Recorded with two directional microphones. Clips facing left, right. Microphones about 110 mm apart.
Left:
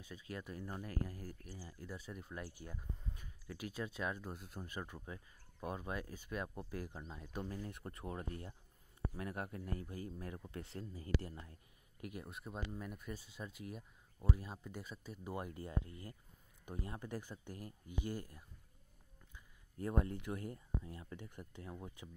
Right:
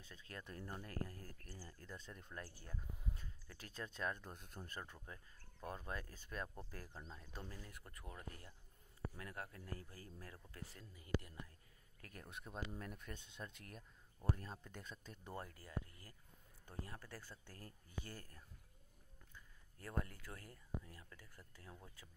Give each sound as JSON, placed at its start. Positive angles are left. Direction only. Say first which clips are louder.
{"t": 0.0, "sound": "speech", "louder": "left 7 dB", "side_deg": 10}
{"t": 7.6, "sound": "speech", "louder": "left 10 dB", "side_deg": 25}
{"t": 12.0, "sound": "speech", "louder": "left 7 dB", "side_deg": 10}
{"t": 15.4, "sound": "speech", "louder": "left 7 dB", "side_deg": 25}